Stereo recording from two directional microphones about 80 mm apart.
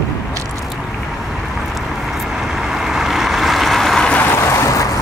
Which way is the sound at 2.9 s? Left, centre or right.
Centre.